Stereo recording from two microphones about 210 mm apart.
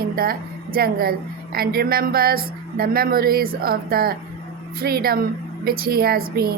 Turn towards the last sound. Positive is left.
turn(degrees=-45)  # may be behind; listen again after turning